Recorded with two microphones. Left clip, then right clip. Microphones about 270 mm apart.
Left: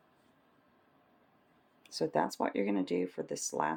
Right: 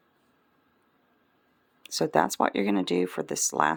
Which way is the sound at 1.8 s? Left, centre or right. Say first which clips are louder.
Right 8 dB; right.